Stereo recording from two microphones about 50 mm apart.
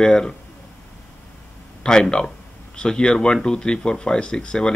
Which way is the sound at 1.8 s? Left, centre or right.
Centre.